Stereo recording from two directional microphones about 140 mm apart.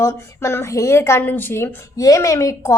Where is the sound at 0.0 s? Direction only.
20° left (ahead or behind).